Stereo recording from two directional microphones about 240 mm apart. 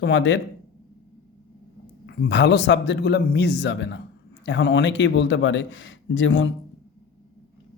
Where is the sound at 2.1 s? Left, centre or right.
Left.